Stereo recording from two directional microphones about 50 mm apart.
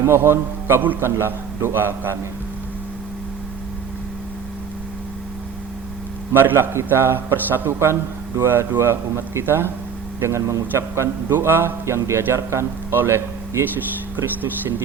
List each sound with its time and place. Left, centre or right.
0.0 s a man's voice: right
6.3 s a man's voice: right
8.4 s a man's voice: right
10.2 s speech: right
11.3 s a man's voice: right
12.9 s speech: right